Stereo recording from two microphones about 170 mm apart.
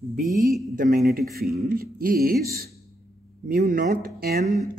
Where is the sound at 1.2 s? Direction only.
60° right (ahead or behind).